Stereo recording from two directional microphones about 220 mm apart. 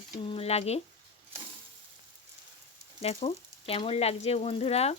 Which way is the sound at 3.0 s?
25° left (ahead or behind).